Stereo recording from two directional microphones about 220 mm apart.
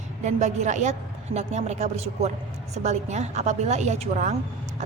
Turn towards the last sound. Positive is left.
turn(degrees=-30)  # may be behind; listen again after turning